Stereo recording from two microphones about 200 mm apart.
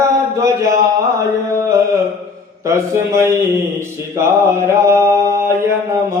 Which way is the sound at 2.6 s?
15° right (ahead or behind).